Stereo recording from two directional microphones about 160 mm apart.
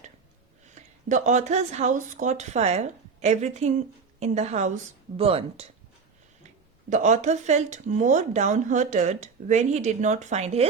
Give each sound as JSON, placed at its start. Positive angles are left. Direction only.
{"t": 0.6, "sound": "speech", "side_deg": -50}
{"t": 6.9, "sound": "speech", "side_deg": -50}